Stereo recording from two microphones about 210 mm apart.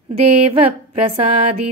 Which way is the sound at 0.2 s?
30° right (ahead or behind).